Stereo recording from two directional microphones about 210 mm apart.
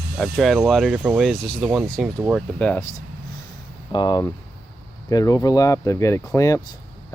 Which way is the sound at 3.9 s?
20° left (ahead or behind).